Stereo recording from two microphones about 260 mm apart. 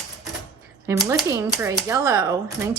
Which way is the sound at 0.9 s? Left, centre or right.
Centre.